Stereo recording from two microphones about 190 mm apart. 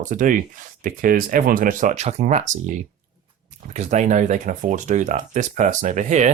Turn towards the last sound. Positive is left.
turn(degrees=-40)  # may be behind; listen again after turning